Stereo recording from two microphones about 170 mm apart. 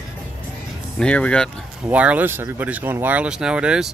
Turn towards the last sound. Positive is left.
turn(degrees=-5)  # may be behind; listen again after turning